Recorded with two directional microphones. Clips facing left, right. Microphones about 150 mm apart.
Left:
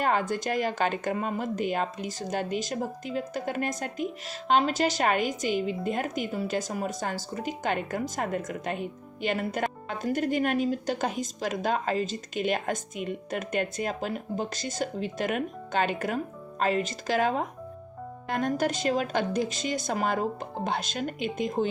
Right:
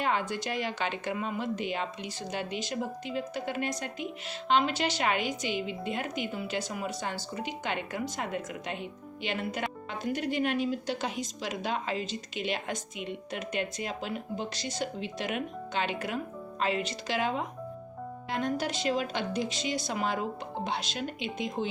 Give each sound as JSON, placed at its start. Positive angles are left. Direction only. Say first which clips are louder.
{"t": 0.0, "sound": "speech", "louder": "left 4 dB", "side_deg": 45}